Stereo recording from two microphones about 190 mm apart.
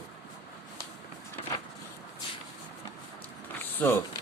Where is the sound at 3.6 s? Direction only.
10° left (ahead or behind).